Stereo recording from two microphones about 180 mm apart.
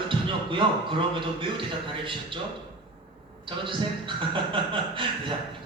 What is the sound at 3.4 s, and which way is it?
A man's voice, 30° right (ahead or behind).